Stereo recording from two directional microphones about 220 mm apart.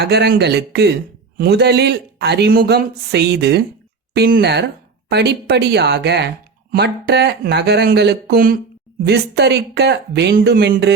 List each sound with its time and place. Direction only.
0.0 s speech: 50° right (ahead or behind)